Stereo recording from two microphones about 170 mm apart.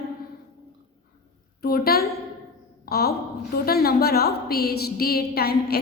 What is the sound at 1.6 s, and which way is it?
A woman's voice, 65° left (ahead or behind).